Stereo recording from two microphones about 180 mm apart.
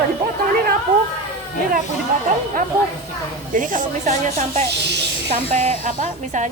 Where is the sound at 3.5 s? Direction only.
45° right (ahead or behind).